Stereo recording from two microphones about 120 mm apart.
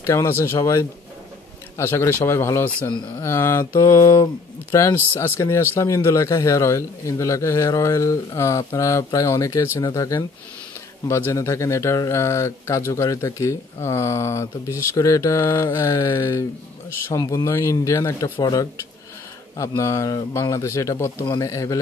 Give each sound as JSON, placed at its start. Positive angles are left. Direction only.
{"t": 0.0, "sound": "speech", "side_deg": 25}